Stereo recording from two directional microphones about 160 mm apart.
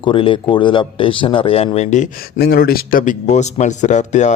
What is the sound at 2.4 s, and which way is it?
Speech, 70° left (ahead or behind).